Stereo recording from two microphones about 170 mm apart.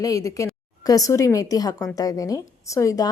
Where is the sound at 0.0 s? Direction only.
20° left (ahead or behind).